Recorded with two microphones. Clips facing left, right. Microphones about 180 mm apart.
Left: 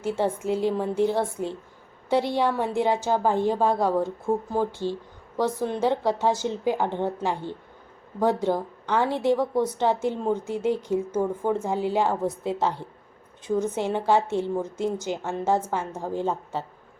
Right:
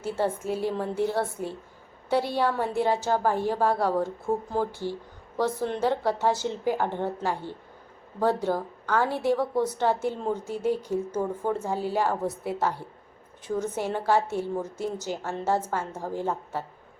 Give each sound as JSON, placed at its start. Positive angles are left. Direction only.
{"t": 0.0, "sound": "a woman's voice", "side_deg": 15}